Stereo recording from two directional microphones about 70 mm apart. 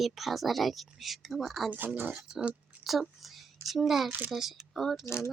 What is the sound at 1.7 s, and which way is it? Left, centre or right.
Speech, right.